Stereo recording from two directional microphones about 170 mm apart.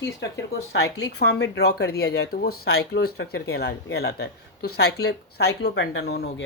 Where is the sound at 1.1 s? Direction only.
75° left (ahead or behind).